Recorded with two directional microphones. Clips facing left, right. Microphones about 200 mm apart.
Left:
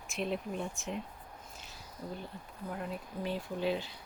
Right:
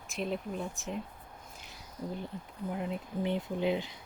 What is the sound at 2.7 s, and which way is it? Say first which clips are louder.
Speech: right 4 dB; 20° right (ahead or behind).